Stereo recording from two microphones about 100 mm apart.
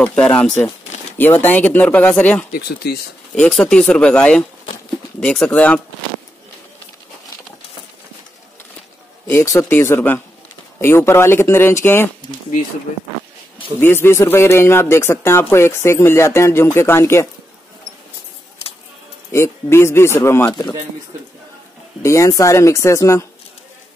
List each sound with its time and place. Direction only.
0.0 s speech: 10° left (ahead or behind)
9.3 s speech: 30° left (ahead or behind)
13.7 s speech: 20° left (ahead or behind)
19.3 s speech: 25° left (ahead or behind)
22.0 s speech: 30° left (ahead or behind)